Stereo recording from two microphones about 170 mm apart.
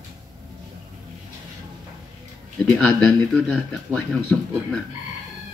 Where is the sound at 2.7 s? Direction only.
5° left (ahead or behind).